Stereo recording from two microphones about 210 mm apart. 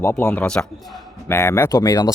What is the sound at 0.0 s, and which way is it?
Speech, 10° left (ahead or behind).